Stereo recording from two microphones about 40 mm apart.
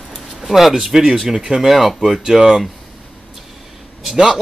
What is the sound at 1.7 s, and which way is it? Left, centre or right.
Speech, centre.